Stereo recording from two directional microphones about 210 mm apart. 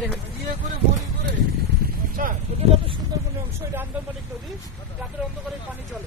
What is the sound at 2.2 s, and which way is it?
Speech, 45° right (ahead or behind).